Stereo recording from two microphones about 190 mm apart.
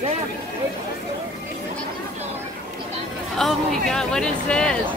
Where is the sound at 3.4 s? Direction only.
Centre (ahead or behind).